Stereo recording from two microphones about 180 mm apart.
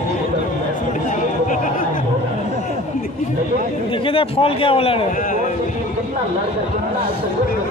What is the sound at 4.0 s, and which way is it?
Speech, 30° left (ahead or behind).